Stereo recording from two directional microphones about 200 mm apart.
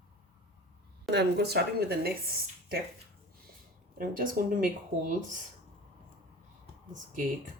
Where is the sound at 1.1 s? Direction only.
55° right (ahead or behind).